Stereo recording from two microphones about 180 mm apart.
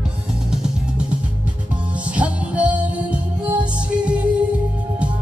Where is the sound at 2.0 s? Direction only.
5° right (ahead or behind).